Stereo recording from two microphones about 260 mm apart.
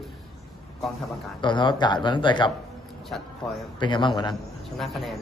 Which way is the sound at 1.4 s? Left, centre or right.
Centre.